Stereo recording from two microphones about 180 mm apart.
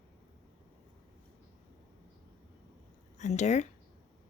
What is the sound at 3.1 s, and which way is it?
Speech, 40° left (ahead or behind).